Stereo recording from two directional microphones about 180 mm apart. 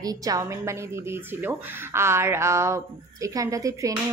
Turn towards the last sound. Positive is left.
turn(degrees=-20)  # may be behind; listen again after turning